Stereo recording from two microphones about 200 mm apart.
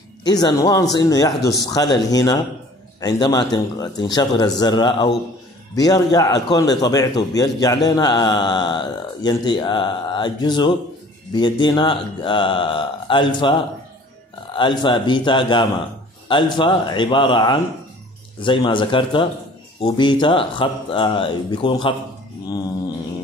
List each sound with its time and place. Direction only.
0.2 s a man's voice: 20° left (ahead or behind)